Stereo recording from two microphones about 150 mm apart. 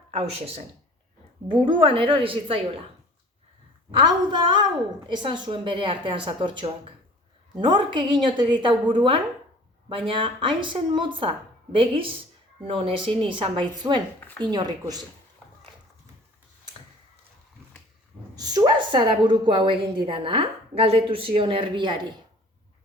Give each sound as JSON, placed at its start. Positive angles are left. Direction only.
{"t": 0.1, "sound": "speech", "side_deg": -40}
{"t": 3.9, "sound": "speech", "side_deg": -30}
{"t": 14.2, "sound": "a woman's voice", "side_deg": 15}
{"t": 14.5, "sound": "speech", "side_deg": -25}
{"t": 18.3, "sound": "speech", "side_deg": -25}